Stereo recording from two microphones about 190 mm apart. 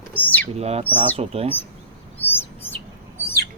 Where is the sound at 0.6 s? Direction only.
35° right (ahead or behind).